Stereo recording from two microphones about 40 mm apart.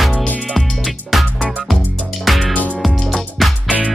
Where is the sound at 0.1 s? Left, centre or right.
Left.